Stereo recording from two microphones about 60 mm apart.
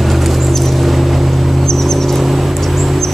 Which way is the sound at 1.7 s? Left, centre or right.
Centre.